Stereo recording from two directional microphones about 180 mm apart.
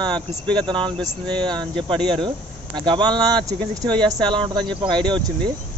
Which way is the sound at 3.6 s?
5° left (ahead or behind).